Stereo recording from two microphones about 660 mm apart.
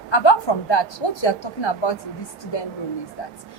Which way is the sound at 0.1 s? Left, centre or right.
Left.